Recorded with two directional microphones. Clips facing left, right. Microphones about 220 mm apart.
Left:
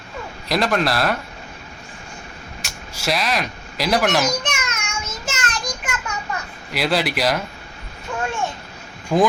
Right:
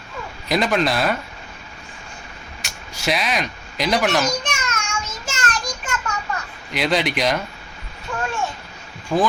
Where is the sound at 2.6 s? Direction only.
Centre (ahead or behind).